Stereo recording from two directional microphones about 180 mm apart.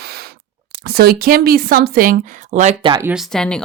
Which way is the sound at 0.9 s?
60° right (ahead or behind).